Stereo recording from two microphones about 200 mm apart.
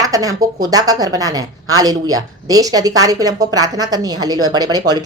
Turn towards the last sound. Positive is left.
turn(degrees=-20)  # may be behind; listen again after turning